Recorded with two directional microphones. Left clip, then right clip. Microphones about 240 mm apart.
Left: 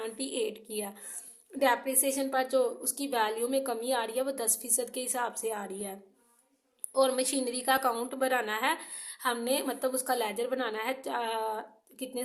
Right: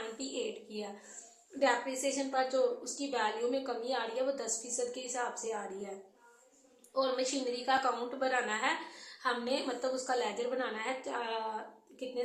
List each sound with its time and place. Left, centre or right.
0.2 s a woman's voice: left
6.9 s a woman's voice: left